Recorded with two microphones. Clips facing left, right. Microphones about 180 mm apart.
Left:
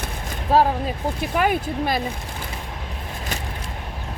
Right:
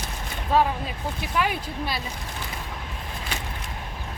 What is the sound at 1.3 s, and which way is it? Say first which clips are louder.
Speech: left 5 dB; 50° left (ahead or behind).